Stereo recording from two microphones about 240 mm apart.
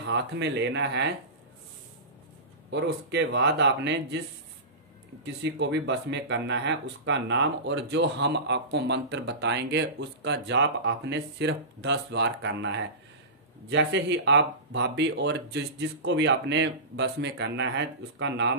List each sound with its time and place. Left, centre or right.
0.1 s speech: right
2.7 s speech: right
5.2 s speech: right